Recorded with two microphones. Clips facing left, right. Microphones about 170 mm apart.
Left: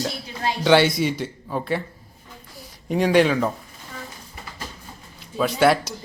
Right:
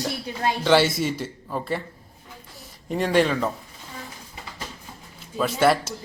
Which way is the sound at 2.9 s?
Centre (ahead or behind).